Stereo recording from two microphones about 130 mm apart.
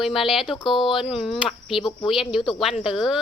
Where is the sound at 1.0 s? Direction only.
5° right (ahead or behind).